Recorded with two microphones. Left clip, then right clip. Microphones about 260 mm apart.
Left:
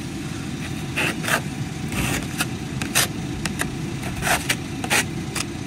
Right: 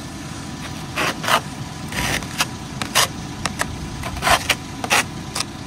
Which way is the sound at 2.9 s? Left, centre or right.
Right.